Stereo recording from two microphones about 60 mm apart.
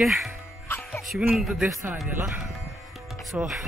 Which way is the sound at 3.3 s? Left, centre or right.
Right.